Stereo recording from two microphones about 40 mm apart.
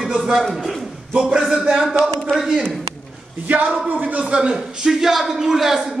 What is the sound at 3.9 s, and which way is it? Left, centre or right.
Speech, right.